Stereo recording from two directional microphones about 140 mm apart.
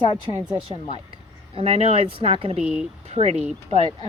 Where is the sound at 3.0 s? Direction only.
50° right (ahead or behind).